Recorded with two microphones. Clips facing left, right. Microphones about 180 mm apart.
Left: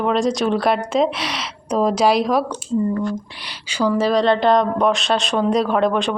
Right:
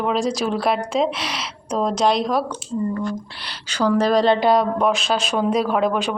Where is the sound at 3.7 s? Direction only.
10° left (ahead or behind).